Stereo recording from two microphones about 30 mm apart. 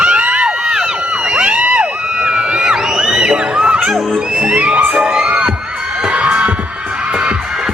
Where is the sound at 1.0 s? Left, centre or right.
Right.